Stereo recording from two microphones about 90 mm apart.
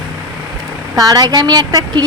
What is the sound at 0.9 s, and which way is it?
Speech, 45° right (ahead or behind).